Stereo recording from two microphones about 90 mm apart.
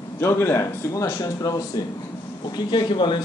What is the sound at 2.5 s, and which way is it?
Speech, 55° left (ahead or behind).